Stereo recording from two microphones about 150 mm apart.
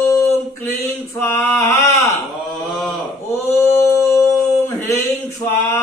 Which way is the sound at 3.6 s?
20° left (ahead or behind).